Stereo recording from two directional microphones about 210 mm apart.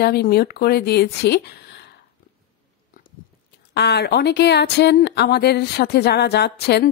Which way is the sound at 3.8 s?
50° left (ahead or behind).